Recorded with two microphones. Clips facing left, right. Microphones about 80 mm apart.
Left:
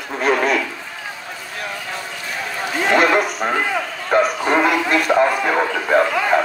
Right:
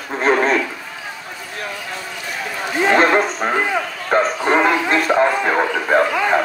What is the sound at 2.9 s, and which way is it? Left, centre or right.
Speech, right.